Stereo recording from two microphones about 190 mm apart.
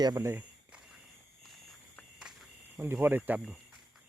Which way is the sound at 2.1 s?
5° right (ahead or behind).